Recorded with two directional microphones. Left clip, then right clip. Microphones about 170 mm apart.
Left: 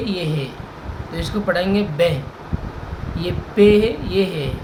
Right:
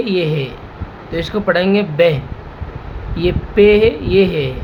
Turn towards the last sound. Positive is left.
turn(degrees=-60)  # may be behind; listen again after turning